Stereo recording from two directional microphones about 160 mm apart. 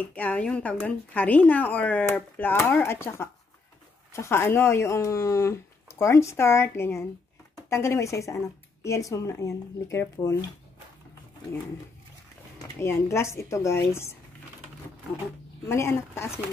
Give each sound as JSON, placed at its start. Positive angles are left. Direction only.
{"t": 0.0, "sound": "speech", "side_deg": 10}
{"t": 12.8, "sound": "speech", "side_deg": 15}
{"t": 15.7, "sound": "speech", "side_deg": 15}